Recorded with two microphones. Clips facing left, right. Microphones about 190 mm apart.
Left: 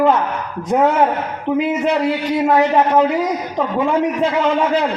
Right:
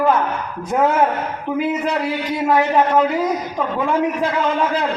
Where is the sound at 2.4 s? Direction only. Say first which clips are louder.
Left 1 dB; 25° left (ahead or behind).